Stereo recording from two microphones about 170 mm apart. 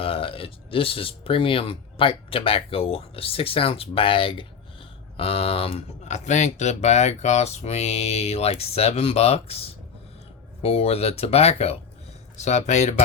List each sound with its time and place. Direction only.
0.0 s speech: 30° left (ahead or behind)